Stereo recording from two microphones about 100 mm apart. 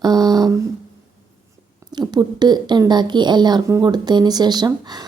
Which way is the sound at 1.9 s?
45° right (ahead or behind).